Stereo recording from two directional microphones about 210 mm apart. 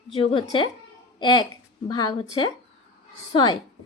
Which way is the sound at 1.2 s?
20° left (ahead or behind).